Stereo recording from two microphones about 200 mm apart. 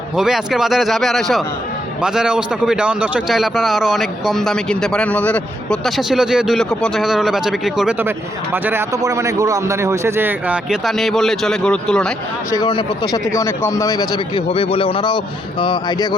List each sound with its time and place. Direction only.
0.2 s a man's voice: centre (ahead or behind)
12.5 s speech: 20° left (ahead or behind)